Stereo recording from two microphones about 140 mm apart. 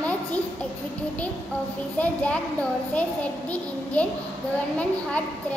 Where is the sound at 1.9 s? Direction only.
10° left (ahead or behind).